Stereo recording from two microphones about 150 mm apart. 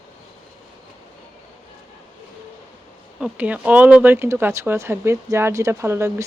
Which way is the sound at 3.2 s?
10° right (ahead or behind).